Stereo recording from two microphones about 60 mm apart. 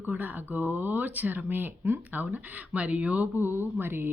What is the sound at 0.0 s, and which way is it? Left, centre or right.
Speech, right.